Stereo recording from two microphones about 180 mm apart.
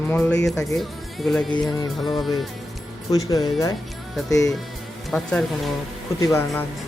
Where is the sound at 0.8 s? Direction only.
Centre (ahead or behind).